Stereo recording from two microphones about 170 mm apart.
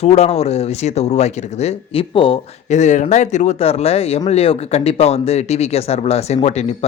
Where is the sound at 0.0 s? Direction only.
40° left (ahead or behind).